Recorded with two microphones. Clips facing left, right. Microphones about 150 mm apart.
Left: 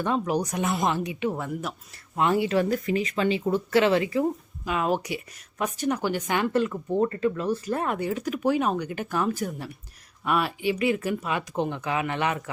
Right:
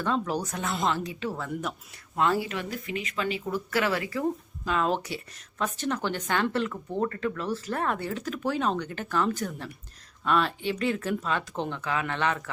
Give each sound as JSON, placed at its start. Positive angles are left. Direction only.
{"t": 0.0, "sound": "speech", "side_deg": 15}
{"t": 2.6, "sound": "speech", "side_deg": 45}